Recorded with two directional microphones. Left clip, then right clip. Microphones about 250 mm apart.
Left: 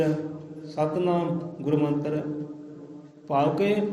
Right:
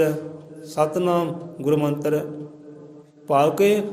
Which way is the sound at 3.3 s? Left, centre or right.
Right.